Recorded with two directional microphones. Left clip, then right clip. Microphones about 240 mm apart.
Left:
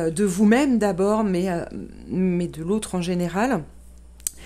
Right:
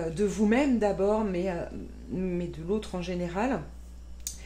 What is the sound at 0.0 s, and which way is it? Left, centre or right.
Speech, left.